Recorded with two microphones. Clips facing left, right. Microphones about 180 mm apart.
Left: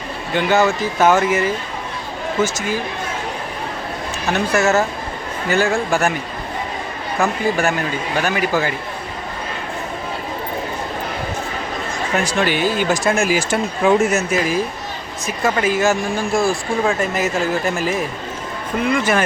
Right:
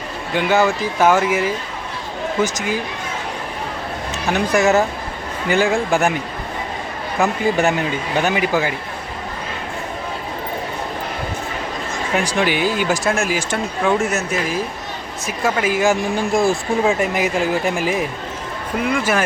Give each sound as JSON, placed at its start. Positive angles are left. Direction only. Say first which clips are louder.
{"t": 0.3, "sound": "speech", "louder": "left 1 dB", "side_deg": -10}
{"t": 4.3, "sound": "speech", "louder": "right 1 dB", "side_deg": -15}
{"t": 7.2, "sound": "speech", "louder": "right 1 dB", "side_deg": -20}
{"t": 12.1, "sound": "speech", "louder": "even", "side_deg": -15}
{"t": 13.1, "sound": "speech", "louder": "left 2 dB", "side_deg": 0}
{"t": 15.4, "sound": "speech", "louder": "even", "side_deg": -10}